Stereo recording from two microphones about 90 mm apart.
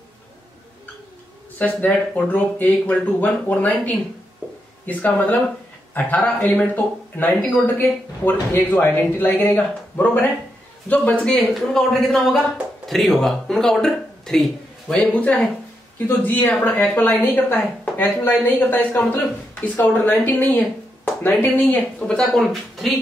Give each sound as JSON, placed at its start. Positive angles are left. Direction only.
{"t": 1.6, "sound": "a woman's voice", "side_deg": 15}
{"t": 11.3, "sound": "a man's voice", "side_deg": 0}
{"t": 15.1, "sound": "a woman's voice", "side_deg": 15}
{"t": 22.0, "sound": "a man's voice", "side_deg": 5}